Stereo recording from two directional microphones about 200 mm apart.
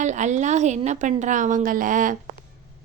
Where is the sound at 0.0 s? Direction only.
35° right (ahead or behind).